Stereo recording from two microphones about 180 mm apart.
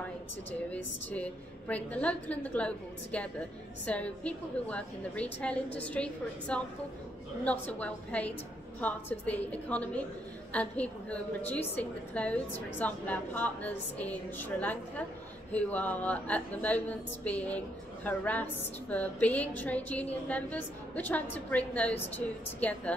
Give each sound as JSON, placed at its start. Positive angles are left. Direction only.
{"t": 0.5, "sound": "a woman's voice", "side_deg": 10}